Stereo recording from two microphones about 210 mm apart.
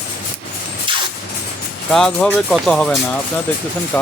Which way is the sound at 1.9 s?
5° left (ahead or behind).